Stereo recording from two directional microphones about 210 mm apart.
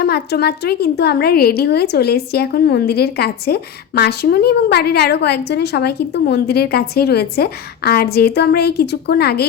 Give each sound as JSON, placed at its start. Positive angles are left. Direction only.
{"t": 0.0, "sound": "a woman's voice", "side_deg": 50}